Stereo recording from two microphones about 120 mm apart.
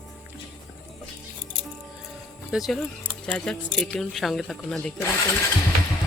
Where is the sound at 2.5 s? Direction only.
Centre (ahead or behind).